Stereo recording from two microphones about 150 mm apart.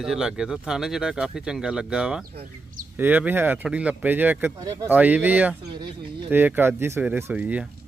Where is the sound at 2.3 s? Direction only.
90° right.